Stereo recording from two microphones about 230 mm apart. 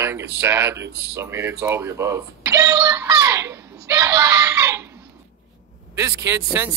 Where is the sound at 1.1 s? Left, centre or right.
Centre.